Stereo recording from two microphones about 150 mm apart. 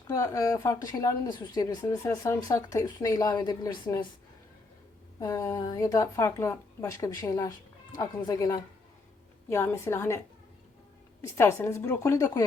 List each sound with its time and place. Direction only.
0.1 s a woman's voice: 20° left (ahead or behind)
5.2 s a woman's voice: 20° left (ahead or behind)
11.2 s a woman's voice: 20° left (ahead or behind)